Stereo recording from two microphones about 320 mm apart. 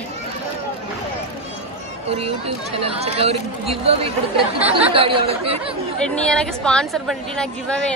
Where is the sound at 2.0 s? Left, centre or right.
Centre.